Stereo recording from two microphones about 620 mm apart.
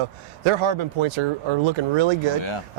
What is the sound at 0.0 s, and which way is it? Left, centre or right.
Speech, right.